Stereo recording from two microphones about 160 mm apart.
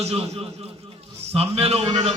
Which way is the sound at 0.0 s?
40° right (ahead or behind).